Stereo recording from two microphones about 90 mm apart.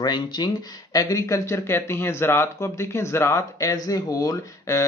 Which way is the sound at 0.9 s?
40° left (ahead or behind).